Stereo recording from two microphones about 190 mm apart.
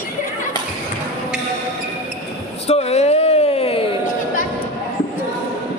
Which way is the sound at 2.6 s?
35° left (ahead or behind).